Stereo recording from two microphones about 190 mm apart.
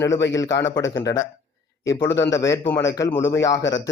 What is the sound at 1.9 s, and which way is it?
Speech, 15° left (ahead or behind).